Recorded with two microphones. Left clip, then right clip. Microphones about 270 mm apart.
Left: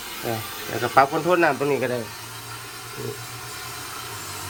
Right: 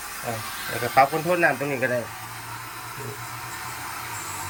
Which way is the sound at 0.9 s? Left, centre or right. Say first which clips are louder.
Left 2 dB; centre.